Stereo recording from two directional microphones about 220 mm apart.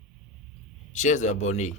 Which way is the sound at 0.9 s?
35° left (ahead or behind).